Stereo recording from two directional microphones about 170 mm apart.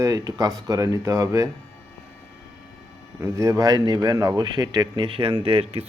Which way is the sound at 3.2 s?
20° right (ahead or behind).